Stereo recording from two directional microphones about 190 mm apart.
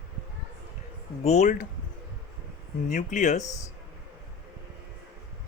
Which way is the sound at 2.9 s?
40° left (ahead or behind).